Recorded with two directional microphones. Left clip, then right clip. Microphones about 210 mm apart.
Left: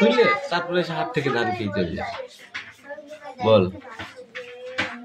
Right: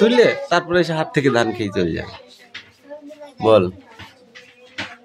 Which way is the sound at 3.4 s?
40° right (ahead or behind).